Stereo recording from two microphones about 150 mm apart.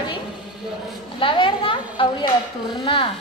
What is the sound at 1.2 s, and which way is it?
A woman's voice, 35° left (ahead or behind).